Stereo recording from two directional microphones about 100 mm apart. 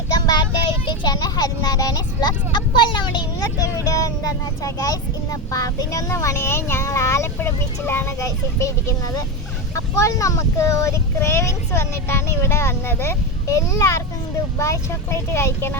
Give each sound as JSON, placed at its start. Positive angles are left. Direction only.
{"t": 0.1, "sound": "child singing", "side_deg": 45}
{"t": 0.9, "sound": "speech", "side_deg": 45}
{"t": 3.6, "sound": "speech", "side_deg": 35}